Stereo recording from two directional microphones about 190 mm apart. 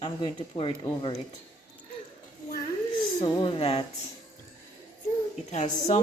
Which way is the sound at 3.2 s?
25° left (ahead or behind).